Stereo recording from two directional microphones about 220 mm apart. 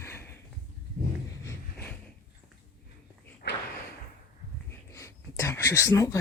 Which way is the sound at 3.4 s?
50° left (ahead or behind).